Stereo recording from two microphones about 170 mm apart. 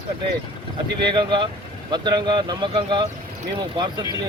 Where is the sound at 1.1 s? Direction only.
30° right (ahead or behind).